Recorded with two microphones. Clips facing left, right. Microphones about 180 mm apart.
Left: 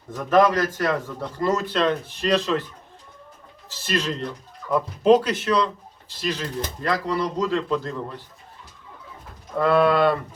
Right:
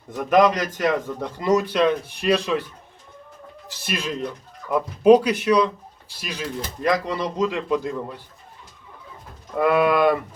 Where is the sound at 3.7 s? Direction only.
10° right (ahead or behind).